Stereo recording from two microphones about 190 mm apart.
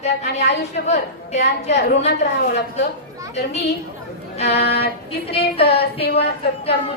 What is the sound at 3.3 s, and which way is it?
Speech, 35° left (ahead or behind).